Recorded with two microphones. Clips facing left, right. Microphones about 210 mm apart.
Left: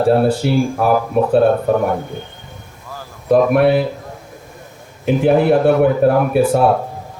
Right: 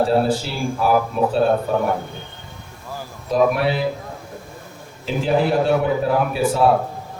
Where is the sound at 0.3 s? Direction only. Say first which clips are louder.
Left 7 dB; 55° left (ahead or behind).